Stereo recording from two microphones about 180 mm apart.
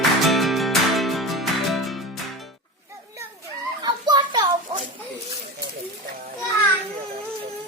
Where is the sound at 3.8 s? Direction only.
25° right (ahead or behind).